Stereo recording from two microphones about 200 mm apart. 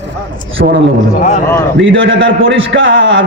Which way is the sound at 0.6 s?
55° right (ahead or behind).